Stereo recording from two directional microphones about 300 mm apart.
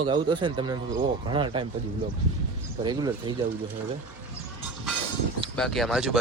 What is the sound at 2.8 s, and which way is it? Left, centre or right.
Speech, centre.